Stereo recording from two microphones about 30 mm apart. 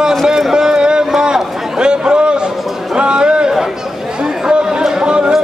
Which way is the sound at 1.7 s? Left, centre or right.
Right.